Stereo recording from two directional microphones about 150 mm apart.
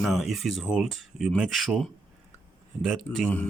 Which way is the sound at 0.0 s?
Centre (ahead or behind).